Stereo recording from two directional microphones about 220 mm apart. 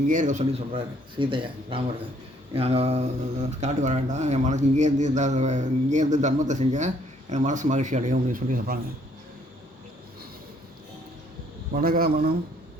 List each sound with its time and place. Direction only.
0.1 s speech: 35° right (ahead or behind)
11.7 s a man's voice: 40° right (ahead or behind)